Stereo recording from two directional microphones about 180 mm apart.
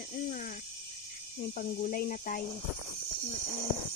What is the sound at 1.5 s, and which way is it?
Speech, 50° left (ahead or behind).